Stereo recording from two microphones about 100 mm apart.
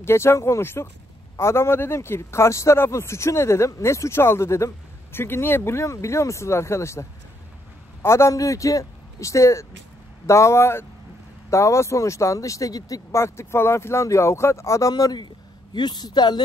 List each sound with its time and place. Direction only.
0.0 s speech: 25° left (ahead or behind); by 16.4 s 45° left (ahead or behind)